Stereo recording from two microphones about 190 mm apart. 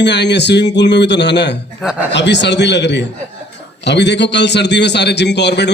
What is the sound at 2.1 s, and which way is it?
A man's voice, 65° left (ahead or behind).